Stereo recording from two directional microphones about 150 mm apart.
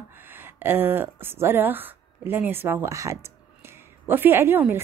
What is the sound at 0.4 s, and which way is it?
A woman's voice, 15° right (ahead or behind).